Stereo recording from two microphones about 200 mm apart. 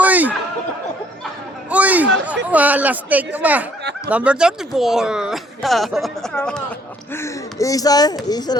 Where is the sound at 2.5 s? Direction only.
5° right (ahead or behind).